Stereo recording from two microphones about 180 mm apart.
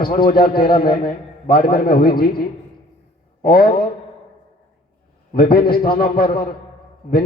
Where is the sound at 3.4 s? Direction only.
55° left (ahead or behind).